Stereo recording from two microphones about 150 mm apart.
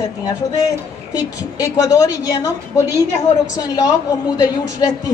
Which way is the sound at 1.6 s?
20° left (ahead or behind).